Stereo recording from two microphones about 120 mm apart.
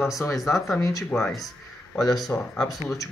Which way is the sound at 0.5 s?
Centre (ahead or behind).